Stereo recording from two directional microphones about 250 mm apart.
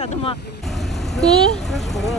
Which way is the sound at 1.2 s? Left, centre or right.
Centre.